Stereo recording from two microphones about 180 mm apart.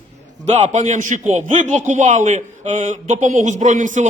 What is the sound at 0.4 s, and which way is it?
A man's voice, 40° right (ahead or behind).